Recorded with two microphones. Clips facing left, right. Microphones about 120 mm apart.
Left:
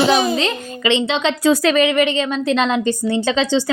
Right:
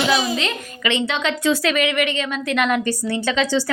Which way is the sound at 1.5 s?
35° left (ahead or behind).